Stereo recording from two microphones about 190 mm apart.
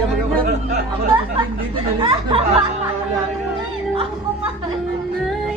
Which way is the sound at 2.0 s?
30° right (ahead or behind).